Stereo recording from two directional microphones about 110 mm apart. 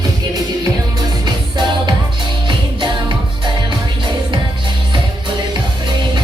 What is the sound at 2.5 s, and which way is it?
Music, 45° right (ahead or behind).